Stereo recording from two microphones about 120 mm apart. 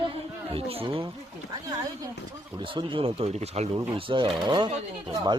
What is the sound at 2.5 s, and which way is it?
A man's voice, 45° right (ahead or behind).